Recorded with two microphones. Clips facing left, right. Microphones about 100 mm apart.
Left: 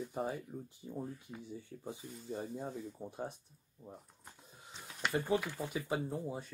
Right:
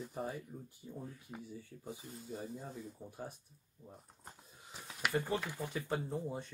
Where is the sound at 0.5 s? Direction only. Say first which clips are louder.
Left 5 dB; 35° left (ahead or behind).